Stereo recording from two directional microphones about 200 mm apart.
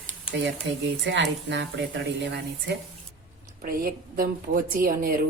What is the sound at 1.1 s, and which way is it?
A woman's voice, 60° right (ahead or behind).